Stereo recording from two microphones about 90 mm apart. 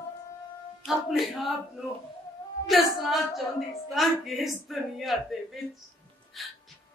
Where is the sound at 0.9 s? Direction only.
Centre (ahead or behind).